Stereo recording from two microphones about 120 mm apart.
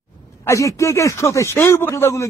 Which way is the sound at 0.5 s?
25° left (ahead or behind).